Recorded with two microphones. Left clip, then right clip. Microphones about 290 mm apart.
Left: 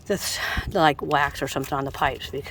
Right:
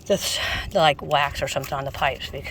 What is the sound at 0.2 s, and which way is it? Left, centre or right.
Speech, centre.